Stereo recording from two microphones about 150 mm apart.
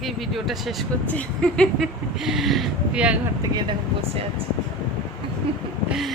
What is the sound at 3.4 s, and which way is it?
Speech, 30° right (ahead or behind).